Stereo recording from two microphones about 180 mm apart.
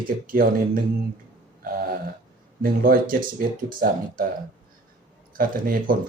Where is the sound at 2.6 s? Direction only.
55° right (ahead or behind).